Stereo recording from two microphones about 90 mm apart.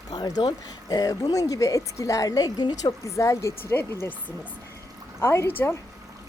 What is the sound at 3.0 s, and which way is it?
A woman's voice, 35° left (ahead or behind).